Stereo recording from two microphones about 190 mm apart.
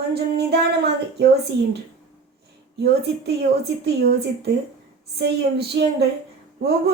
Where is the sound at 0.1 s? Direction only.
60° right (ahead or behind).